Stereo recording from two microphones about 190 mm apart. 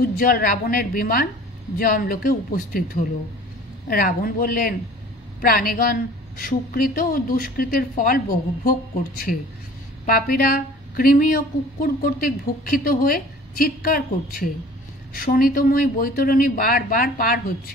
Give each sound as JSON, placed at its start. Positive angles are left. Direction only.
{"t": 0.2, "sound": "speech", "side_deg": 50}
{"t": 10.0, "sound": "speech", "side_deg": 50}